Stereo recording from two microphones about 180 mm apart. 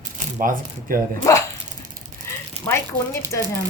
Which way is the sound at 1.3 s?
15° left (ahead or behind).